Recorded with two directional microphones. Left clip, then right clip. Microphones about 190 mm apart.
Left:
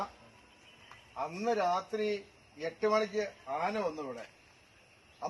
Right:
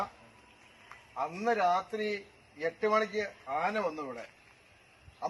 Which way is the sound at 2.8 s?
15° left (ahead or behind).